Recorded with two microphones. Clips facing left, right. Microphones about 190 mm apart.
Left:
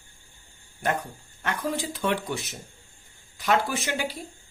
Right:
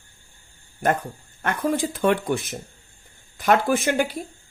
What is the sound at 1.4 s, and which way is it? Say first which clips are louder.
Speech: right 6 dB; 50° right (ahead or behind).